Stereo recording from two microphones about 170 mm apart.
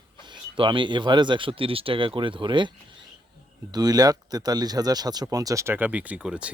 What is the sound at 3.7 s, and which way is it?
Speech, 25° right (ahead or behind).